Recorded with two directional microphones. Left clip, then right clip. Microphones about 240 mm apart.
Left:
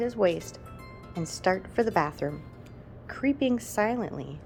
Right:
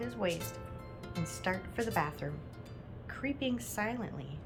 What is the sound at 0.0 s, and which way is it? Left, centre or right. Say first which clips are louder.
A woman's voice: left 10 dB; left.